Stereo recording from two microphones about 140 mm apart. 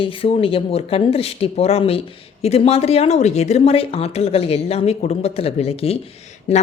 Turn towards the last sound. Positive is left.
turn(degrees=50)  # may be behind; listen again after turning